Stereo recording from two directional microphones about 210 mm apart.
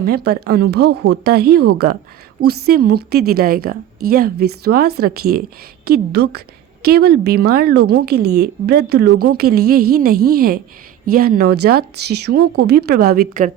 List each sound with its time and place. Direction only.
0.0 s a woman's voice: 50° right (ahead or behind)